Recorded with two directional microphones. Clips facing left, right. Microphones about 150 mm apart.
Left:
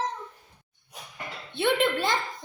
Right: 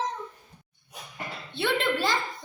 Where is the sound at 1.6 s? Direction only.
20° left (ahead or behind).